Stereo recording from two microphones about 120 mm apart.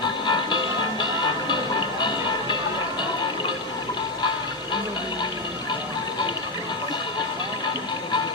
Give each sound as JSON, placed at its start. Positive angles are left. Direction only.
{"t": 0.0, "sound": "music", "side_deg": 40}